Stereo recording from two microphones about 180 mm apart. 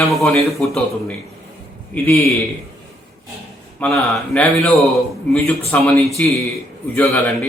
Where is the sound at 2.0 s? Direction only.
15° left (ahead or behind).